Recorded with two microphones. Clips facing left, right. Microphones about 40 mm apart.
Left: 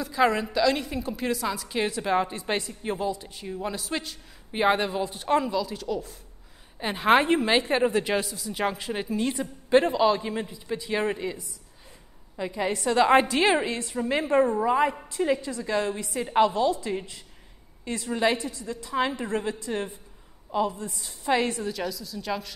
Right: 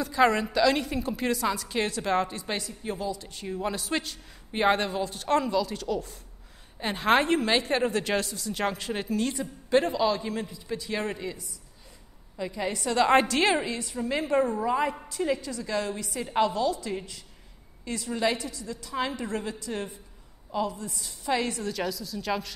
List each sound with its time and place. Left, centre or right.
0.0 s a man's voice: centre
2.3 s a man's voice: left
3.3 s a man's voice: centre
9.3 s a man's voice: left
13.7 s a man's voice: left
14.6 s a woman's voice: centre
18.3 s a woman's voice: left
21.6 s a man's voice: centre